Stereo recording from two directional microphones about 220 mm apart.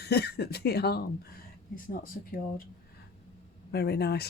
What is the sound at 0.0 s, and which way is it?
Speech, 45° left (ahead or behind).